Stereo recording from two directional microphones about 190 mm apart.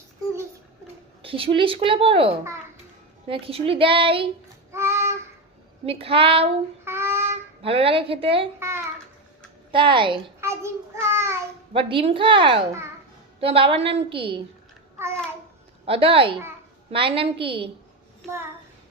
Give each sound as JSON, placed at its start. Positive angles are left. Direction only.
{"t": 1.2, "sound": "a woman's voice", "side_deg": -30}
{"t": 4.7, "sound": "child singing", "side_deg": -15}
{"t": 5.8, "sound": "a woman's voice", "side_deg": -30}
{"t": 6.8, "sound": "a sound", "side_deg": -15}
{"t": 7.6, "sound": "a woman's voice", "side_deg": -30}
{"t": 8.5, "sound": "a sound", "side_deg": -15}
{"t": 9.7, "sound": "a woman's voice", "side_deg": -25}
{"t": 10.4, "sound": "child singing", "side_deg": -15}
{"t": 11.7, "sound": "a woman's voice", "side_deg": -25}
{"t": 14.9, "sound": "a sound", "side_deg": -15}
{"t": 15.9, "sound": "a woman's voice", "side_deg": -30}